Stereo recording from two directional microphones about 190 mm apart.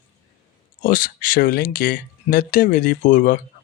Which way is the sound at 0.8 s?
50° left (ahead or behind).